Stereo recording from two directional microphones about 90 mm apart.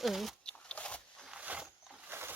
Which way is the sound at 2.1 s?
25° right (ahead or behind).